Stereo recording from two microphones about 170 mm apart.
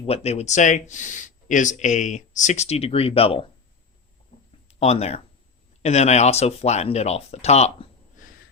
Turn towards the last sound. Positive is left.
turn(degrees=40)  # may be behind; listen again after turning